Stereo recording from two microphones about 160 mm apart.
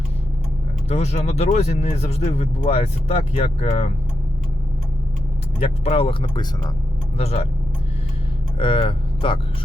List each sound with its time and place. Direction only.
0.9 s speech: 40° left (ahead or behind)
5.6 s speech: 35° left (ahead or behind)
7.2 s speech: 40° left (ahead or behind)
8.5 s speech: 35° left (ahead or behind)